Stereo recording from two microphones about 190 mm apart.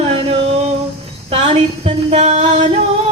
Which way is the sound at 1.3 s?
30° right (ahead or behind).